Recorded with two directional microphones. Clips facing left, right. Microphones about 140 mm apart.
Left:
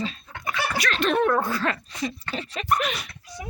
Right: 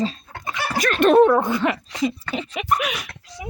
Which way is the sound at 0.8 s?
50° right (ahead or behind).